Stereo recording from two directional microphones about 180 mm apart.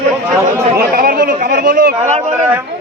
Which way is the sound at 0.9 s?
55° right (ahead or behind).